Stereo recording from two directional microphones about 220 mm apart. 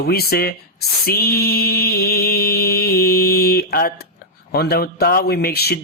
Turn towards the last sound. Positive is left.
turn(degrees=45)  # may be behind; listen again after turning